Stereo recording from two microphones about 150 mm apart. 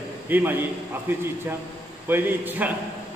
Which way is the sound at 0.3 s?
15° right (ahead or behind).